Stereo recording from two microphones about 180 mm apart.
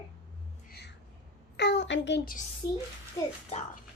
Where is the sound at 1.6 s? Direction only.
70° left (ahead or behind).